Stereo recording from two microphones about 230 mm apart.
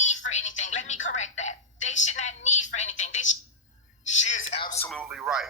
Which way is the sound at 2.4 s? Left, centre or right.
Left.